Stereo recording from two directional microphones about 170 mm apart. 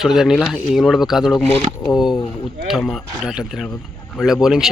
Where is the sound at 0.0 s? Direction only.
5° right (ahead or behind).